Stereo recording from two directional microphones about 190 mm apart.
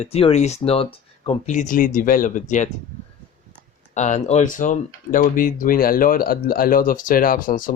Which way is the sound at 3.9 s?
40° left (ahead or behind).